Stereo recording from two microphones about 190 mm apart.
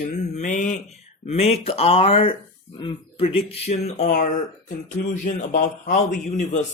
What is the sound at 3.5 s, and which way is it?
A man's voice, 35° left (ahead or behind).